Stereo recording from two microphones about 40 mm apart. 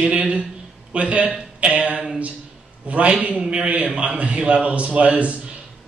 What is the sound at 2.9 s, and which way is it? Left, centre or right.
Speech, right.